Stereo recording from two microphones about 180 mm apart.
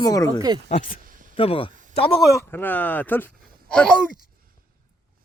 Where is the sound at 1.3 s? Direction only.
30° left (ahead or behind).